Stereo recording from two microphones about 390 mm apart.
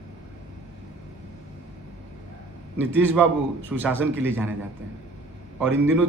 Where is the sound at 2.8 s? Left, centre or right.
Centre.